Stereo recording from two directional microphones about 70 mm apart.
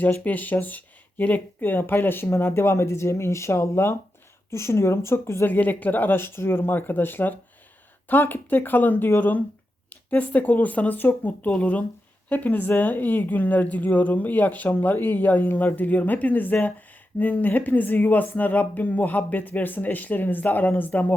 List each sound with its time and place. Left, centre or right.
0.0 s speech: left
5.5 s speech: left